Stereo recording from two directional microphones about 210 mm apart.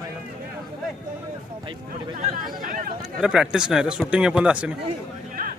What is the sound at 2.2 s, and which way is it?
Speech, 40° right (ahead or behind).